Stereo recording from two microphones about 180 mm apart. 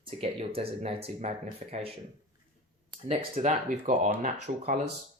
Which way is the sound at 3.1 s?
35° right (ahead or behind).